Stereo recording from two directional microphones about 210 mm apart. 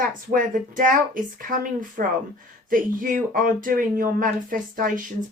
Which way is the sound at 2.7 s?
40° right (ahead or behind).